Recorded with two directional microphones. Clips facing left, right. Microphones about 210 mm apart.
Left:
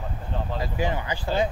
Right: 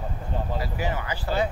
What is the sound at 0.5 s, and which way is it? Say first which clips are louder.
Speech: left 4 dB; 20° left (ahead or behind).